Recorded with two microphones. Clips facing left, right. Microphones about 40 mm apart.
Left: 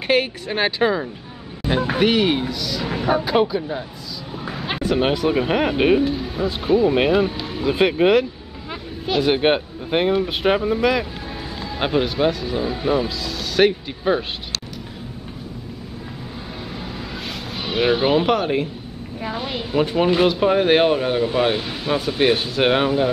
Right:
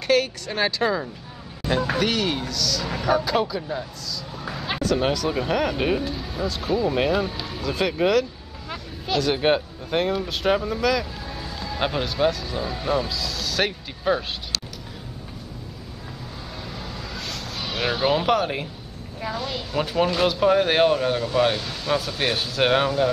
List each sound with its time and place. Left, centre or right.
0.0 s speech: left
7.6 s speech: left
16.8 s a sound: centre
19.2 s speech: left